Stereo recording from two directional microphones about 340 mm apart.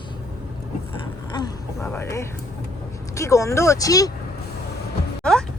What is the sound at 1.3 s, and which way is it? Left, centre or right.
Speech, centre.